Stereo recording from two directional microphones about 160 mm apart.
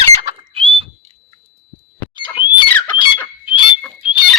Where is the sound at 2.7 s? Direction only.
10° left (ahead or behind).